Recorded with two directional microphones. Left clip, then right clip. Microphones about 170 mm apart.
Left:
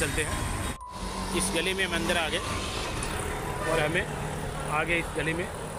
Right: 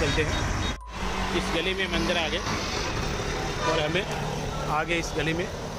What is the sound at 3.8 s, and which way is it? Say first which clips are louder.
Speech: right 1 dB; 20° right (ahead or behind).